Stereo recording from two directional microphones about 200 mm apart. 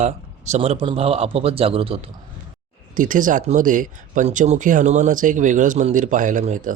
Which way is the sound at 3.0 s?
40° right (ahead or behind).